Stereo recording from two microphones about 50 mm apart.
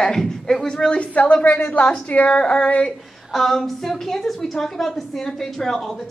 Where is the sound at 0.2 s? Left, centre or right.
Centre.